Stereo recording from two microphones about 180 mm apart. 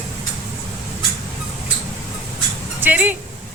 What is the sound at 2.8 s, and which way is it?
Speech, 10° right (ahead or behind).